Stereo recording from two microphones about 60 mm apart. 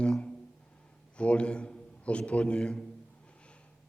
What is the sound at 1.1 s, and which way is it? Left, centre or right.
A man's voice, centre.